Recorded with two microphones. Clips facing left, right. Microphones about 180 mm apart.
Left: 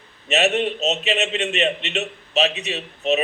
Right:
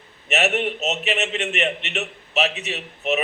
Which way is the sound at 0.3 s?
15° left (ahead or behind).